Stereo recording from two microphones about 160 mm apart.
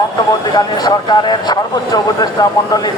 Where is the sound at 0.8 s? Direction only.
30° left (ahead or behind).